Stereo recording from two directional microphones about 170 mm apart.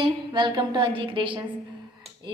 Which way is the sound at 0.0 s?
25° right (ahead or behind).